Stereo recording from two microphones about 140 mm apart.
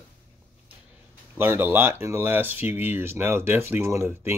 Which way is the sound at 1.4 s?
15° right (ahead or behind).